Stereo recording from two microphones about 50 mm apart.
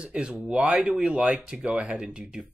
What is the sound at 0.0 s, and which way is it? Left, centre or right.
Speech, centre.